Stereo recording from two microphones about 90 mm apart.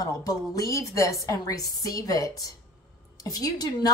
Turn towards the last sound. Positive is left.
turn(degrees=45)  # may be behind; listen again after turning